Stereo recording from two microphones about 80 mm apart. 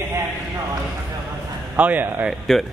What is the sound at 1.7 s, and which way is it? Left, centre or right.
Speech, right.